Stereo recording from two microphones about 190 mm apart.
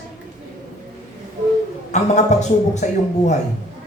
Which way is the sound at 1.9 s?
35° left (ahead or behind).